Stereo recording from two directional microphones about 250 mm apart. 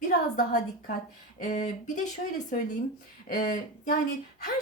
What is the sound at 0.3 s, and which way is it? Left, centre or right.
A woman's voice, left.